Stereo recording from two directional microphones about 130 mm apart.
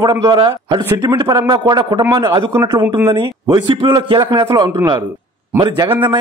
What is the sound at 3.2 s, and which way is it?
Speech, 35° right (ahead or behind).